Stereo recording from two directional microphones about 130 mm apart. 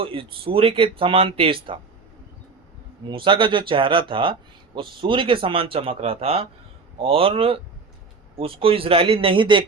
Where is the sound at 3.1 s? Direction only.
40° right (ahead or behind).